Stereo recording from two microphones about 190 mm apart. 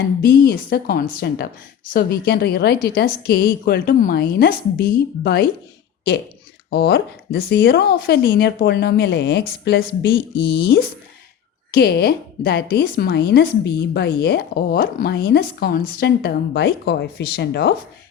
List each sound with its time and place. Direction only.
0.2 s a woman's voice: 55° left (ahead or behind)
6.7 s speech: 55° left (ahead or behind)